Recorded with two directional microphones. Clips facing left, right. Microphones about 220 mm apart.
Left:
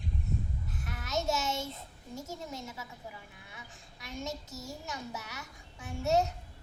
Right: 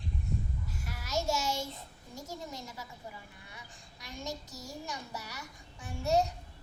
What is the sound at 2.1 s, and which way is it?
Child singing, 25° left (ahead or behind).